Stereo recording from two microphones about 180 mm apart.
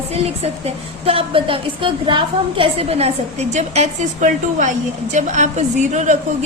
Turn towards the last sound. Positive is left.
turn(degrees=-40)  # may be behind; listen again after turning